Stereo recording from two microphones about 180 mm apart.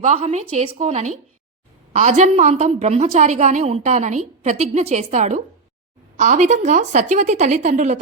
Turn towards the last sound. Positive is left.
turn(degrees=-40)  # may be behind; listen again after turning